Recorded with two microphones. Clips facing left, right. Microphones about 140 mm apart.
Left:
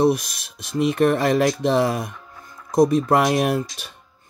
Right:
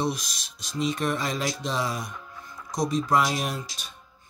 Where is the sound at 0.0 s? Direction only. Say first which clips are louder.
Left 10 dB; 60° left (ahead or behind).